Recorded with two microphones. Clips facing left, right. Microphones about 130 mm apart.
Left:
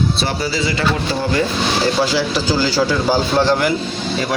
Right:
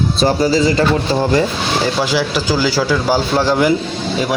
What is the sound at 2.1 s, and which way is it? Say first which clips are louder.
A man's voice: right 1 dB; 10° right (ahead or behind).